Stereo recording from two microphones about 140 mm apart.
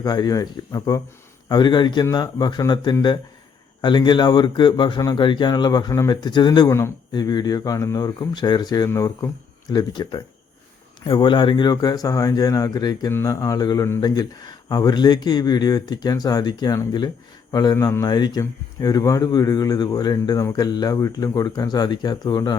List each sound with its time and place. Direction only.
0.0 s a man's voice: 30° left (ahead or behind)